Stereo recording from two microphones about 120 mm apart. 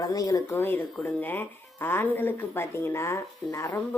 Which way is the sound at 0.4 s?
20° left (ahead or behind).